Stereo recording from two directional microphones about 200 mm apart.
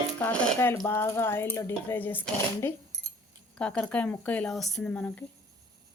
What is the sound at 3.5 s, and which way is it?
Speech, 5° left (ahead or behind).